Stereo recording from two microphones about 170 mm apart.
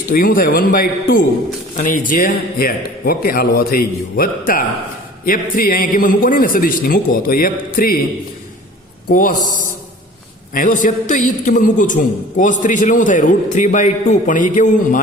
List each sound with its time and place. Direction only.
0.1 s a man's voice: 55° left (ahead or behind)
9.0 s speech: 55° left (ahead or behind)
10.5 s a man's voice: 55° left (ahead or behind)